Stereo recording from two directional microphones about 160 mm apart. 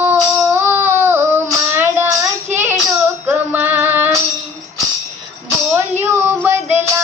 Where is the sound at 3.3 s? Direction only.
10° right (ahead or behind).